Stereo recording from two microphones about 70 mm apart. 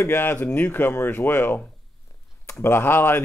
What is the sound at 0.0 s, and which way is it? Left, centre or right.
Speech, left.